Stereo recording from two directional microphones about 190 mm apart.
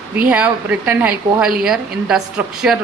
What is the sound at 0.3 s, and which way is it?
A woman's voice, 5° right (ahead or behind).